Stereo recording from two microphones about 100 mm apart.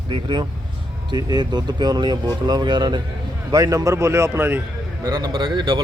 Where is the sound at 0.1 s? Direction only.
50° right (ahead or behind); by 4.6 s 20° right (ahead or behind).